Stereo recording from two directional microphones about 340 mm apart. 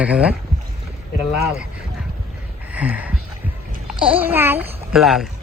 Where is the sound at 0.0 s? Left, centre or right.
Centre.